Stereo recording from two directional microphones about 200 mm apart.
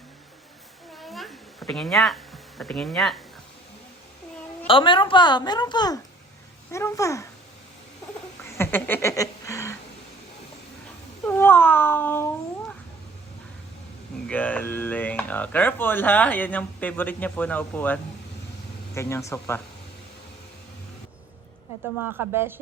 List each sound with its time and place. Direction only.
0.9 s a sound: centre (ahead or behind)
1.6 s speech: centre (ahead or behind)
4.6 s a woman's voice: 25° left (ahead or behind)
8.4 s a sound: 10° left (ahead or behind)
11.3 s speech: 10° left (ahead or behind)
14.3 s speech: 5° left (ahead or behind)
22.3 s speech: 10° right (ahead or behind)